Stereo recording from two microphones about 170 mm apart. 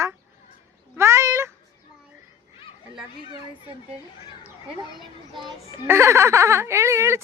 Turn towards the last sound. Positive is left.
turn(degrees=-15)  # may be behind; listen again after turning